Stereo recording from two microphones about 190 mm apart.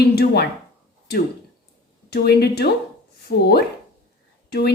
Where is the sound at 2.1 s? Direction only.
55° left (ahead or behind).